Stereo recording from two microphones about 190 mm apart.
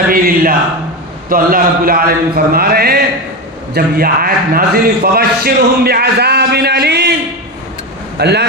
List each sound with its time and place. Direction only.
0.1 s a sound: 50° right (ahead or behind)
1.3 s a man's voice: 50° right (ahead or behind)
8.2 s a man's voice: 60° right (ahead or behind)